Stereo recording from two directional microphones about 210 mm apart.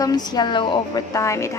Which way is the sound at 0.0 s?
20° left (ahead or behind).